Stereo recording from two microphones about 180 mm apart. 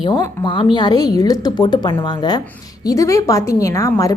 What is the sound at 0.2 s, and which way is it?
A woman's voice, 25° left (ahead or behind).